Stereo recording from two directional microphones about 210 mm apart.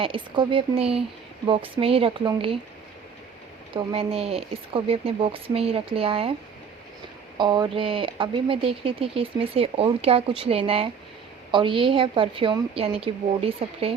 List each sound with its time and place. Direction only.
0.0 s speech: 25° right (ahead or behind)
3.8 s speech: 30° right (ahead or behind)
7.3 s speech: 20° right (ahead or behind)